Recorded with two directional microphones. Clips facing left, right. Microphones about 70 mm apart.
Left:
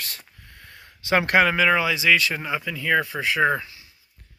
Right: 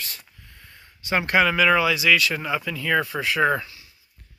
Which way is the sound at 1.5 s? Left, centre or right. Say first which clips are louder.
Right 1 dB; left.